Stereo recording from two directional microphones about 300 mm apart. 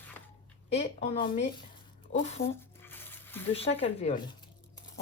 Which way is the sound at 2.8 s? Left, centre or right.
Centre.